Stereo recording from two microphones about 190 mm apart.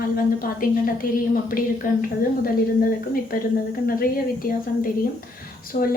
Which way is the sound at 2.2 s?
50° left (ahead or behind).